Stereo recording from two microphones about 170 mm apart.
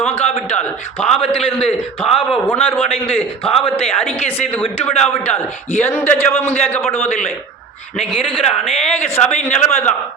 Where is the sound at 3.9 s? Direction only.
5° left (ahead or behind).